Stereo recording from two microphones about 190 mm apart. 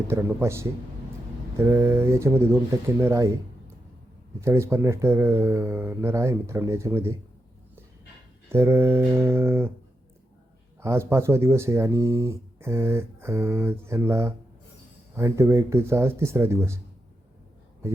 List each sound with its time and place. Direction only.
0.1 s speech: 15° right (ahead or behind)
4.4 s speech: 15° right (ahead or behind)
8.4 s speech: 15° right (ahead or behind)
10.8 s speech: 15° right (ahead or behind)